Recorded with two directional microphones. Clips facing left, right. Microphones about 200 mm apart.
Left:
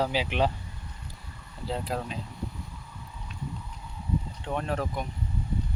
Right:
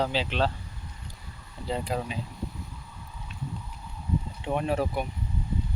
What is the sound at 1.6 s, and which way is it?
Speech, centre (ahead or behind).